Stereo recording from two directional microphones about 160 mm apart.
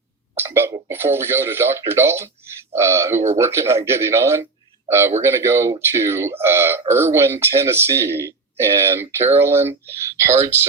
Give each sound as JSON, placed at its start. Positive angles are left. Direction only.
{"t": 0.3, "sound": "speech", "side_deg": -15}